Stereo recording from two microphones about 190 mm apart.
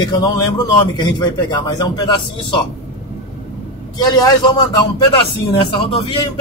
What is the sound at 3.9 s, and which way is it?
Speech, 20° left (ahead or behind).